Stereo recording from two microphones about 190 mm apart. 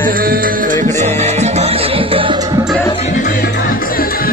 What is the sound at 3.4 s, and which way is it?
Music, 55° left (ahead or behind).